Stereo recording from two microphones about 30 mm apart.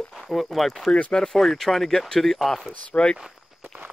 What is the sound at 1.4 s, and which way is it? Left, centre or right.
Speech, centre.